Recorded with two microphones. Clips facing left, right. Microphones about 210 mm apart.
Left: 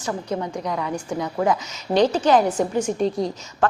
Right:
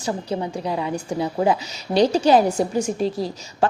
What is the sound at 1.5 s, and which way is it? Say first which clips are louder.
A woman's voice: right 1 dB; 10° right (ahead or behind).